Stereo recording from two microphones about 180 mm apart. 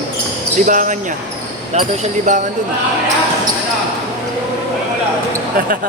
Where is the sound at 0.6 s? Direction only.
45° right (ahead or behind).